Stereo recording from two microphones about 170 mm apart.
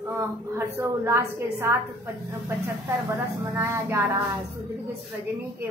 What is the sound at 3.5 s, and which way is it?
Speech, 15° right (ahead or behind).